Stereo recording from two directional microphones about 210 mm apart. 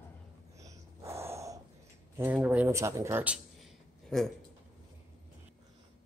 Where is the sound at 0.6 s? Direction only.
15° right (ahead or behind).